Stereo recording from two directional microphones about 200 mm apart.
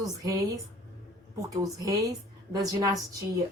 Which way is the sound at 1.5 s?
15° right (ahead or behind).